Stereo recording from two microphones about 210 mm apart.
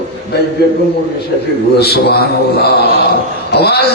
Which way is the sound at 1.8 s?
50° left (ahead or behind).